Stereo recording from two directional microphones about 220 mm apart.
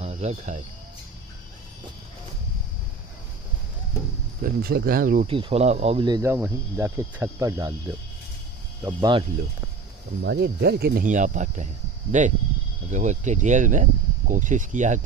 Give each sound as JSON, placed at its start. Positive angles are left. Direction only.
{"t": 0.0, "sound": "speech", "side_deg": -30}
{"t": 4.4, "sound": "speech", "side_deg": -45}
{"t": 5.2, "sound": "speech", "side_deg": -25}
{"t": 8.8, "sound": "speech", "side_deg": -20}
{"t": 10.2, "sound": "speech", "side_deg": -50}